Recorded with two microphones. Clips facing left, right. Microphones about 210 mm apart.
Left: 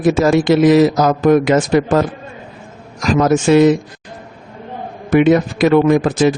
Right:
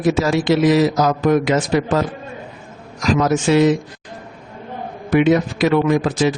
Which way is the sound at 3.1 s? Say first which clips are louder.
Left 5 dB; 50° left (ahead or behind).